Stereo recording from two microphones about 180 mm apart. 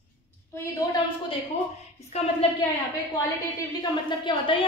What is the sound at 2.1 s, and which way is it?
Speech, 35° left (ahead or behind).